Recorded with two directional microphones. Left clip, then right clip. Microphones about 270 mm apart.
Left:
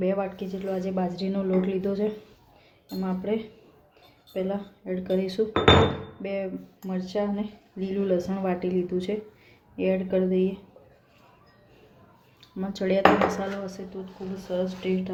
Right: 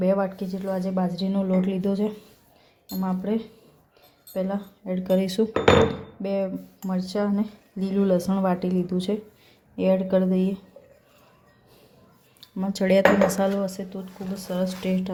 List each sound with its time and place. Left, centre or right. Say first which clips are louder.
0.0 s a woman's voice: right 4 dB; right
12.4 s speech: right 4 dB; centre
13.3 s dishes: right 7 dB; right